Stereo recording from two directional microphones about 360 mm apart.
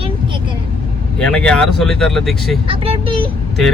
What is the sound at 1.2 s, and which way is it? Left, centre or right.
Speech, centre.